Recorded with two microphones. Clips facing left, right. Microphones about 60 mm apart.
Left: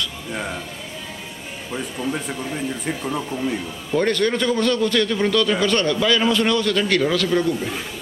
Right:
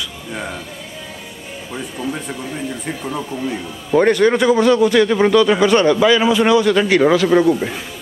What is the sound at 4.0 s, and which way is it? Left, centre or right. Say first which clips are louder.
A man's voice: right 7 dB; centre.